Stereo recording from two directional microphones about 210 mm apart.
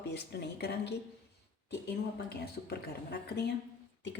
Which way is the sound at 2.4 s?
50° left (ahead or behind).